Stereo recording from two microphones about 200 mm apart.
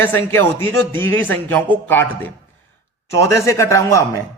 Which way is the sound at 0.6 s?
25° right (ahead or behind).